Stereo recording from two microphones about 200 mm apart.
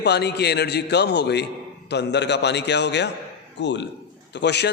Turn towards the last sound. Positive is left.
turn(degrees=60)  # may be behind; listen again after turning